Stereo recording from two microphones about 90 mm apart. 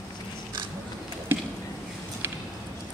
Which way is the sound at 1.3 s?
25° right (ahead or behind).